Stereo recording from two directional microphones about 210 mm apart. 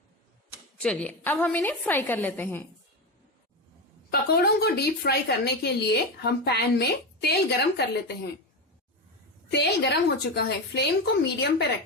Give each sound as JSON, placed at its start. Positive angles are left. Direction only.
{"t": 0.8, "sound": "a woman's voice", "side_deg": 5}
{"t": 4.1, "sound": "a woman's voice", "side_deg": 50}
{"t": 9.5, "sound": "a woman's voice", "side_deg": 55}